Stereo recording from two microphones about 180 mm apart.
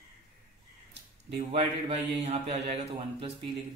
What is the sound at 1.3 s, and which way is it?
A man's voice, 35° right (ahead or behind).